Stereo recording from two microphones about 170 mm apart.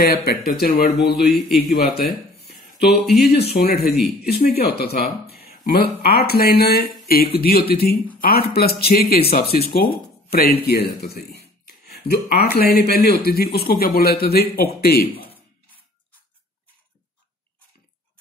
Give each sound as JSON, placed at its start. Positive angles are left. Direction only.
{"t": 0.0, "sound": "speech", "side_deg": 65}
{"t": 1.2, "sound": "a man's voice", "side_deg": 0}
{"t": 1.7, "sound": "speech", "side_deg": 65}
{"t": 3.2, "sound": "speech", "side_deg": 70}